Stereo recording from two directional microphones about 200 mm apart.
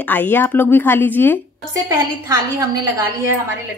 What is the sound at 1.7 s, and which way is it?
A woman's voice, 15° right (ahead or behind).